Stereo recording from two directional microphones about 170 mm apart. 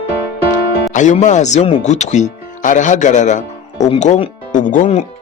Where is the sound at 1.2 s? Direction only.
45° left (ahead or behind).